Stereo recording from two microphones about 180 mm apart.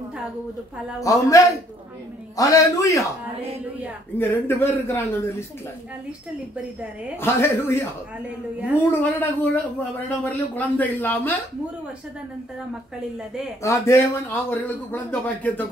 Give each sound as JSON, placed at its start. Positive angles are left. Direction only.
{"t": 1.0, "sound": "speech", "side_deg": 15}
{"t": 4.2, "sound": "speech", "side_deg": 15}
{"t": 7.2, "sound": "speech", "side_deg": 15}
{"t": 13.6, "sound": "speech", "side_deg": 15}